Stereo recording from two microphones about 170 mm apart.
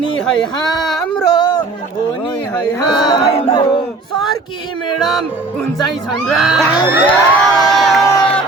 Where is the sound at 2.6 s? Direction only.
25° left (ahead or behind).